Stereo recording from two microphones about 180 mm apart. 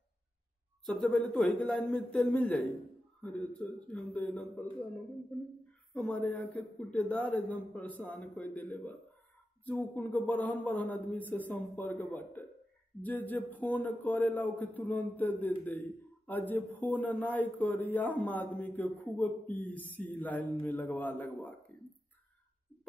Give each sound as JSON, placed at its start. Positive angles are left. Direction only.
{"t": 0.8, "sound": "a man's voice", "side_deg": 0}